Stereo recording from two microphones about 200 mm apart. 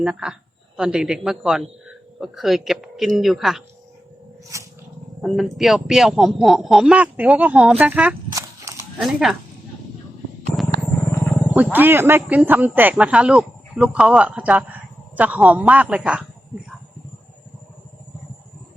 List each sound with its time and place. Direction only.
0.0 s speech: 5° right (ahead or behind)
4.5 s speech: 15° right (ahead or behind)
5.2 s speech: centre (ahead or behind); by 8.9 s 15° right (ahead or behind)
9.0 s speech: centre (ahead or behind)
11.1 s wild animals: 10° left (ahead or behind)
11.5 s speech: 10° right (ahead or behind)